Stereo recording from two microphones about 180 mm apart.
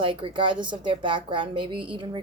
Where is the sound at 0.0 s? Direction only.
25° right (ahead or behind).